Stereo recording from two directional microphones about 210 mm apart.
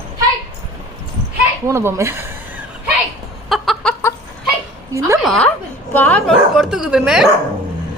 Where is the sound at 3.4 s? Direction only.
Centre (ahead or behind).